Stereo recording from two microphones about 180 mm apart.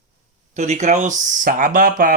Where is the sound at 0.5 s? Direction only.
40° right (ahead or behind).